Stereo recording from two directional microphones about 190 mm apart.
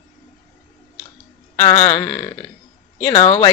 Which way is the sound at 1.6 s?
15° left (ahead or behind).